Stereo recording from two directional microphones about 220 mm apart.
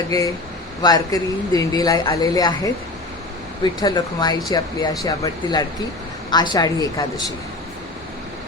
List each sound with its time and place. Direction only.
0.1 s speech: 15° left (ahead or behind)
3.6 s speech: 20° left (ahead or behind)